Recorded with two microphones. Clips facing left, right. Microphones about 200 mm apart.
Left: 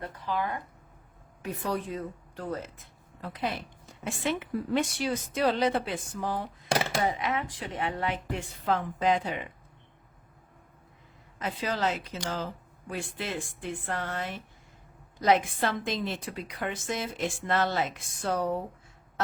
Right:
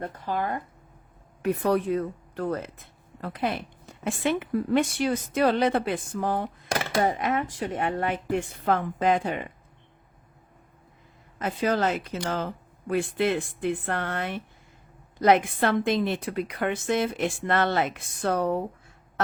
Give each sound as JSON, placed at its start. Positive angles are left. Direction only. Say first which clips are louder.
{"t": 0.0, "sound": "speech", "louder": "right 3 dB", "side_deg": -45}
{"t": 1.4, "sound": "a woman's voice", "louder": "right 8 dB", "side_deg": -60}
{"t": 11.3, "sound": "a woman's voice", "louder": "right 6 dB", "side_deg": -50}